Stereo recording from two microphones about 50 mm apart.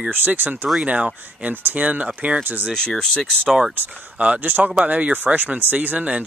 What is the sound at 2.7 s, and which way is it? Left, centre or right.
Speech, centre.